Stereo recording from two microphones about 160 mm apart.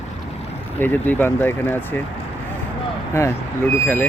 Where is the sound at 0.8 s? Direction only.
10° left (ahead or behind).